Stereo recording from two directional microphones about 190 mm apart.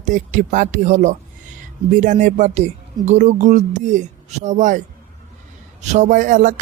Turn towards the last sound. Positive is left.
turn(degrees=-45)  # may be behind; listen again after turning